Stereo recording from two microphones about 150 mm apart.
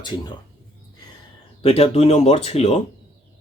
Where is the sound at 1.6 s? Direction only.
40° left (ahead or behind).